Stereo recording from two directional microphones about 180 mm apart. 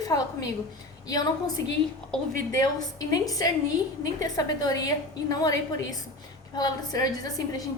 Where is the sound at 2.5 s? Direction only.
20° left (ahead or behind).